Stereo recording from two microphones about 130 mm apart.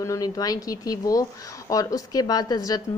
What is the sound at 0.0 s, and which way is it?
A woman's voice, 25° left (ahead or behind).